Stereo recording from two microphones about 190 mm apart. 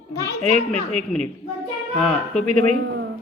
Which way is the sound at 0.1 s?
15° left (ahead or behind).